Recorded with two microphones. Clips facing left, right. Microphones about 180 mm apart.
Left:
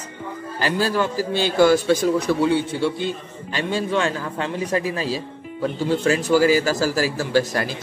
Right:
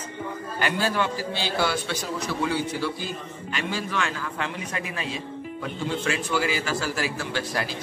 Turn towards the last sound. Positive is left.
turn(degrees=45)  # may be behind; listen again after turning